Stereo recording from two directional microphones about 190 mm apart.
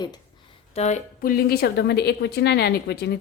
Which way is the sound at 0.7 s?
35° left (ahead or behind).